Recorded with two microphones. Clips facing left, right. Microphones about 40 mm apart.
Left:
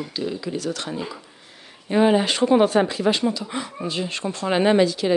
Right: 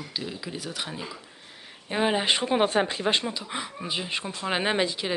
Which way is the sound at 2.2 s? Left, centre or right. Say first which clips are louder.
Left 6 dB; centre.